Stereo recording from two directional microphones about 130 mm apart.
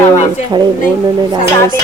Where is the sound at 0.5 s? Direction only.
30° right (ahead or behind).